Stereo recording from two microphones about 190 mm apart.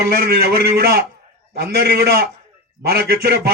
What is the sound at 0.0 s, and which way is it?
A man's voice, 55° right (ahead or behind).